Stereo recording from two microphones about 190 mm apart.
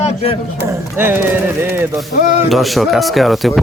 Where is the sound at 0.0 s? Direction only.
30° left (ahead or behind).